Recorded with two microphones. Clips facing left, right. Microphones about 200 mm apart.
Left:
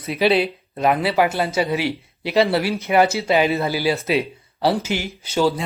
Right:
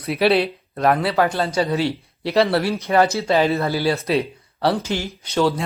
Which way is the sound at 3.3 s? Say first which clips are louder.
Even; centre (ahead or behind).